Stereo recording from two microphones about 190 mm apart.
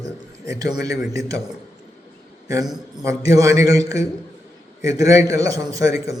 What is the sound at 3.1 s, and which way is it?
A man's voice, 15° right (ahead or behind).